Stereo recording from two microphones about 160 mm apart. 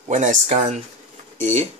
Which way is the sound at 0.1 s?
50° right (ahead or behind).